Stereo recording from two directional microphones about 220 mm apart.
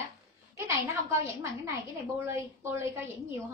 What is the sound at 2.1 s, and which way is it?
Speech, 10° right (ahead or behind).